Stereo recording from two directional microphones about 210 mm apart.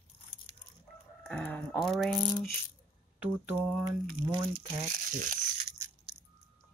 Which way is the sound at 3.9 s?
20° right (ahead or behind).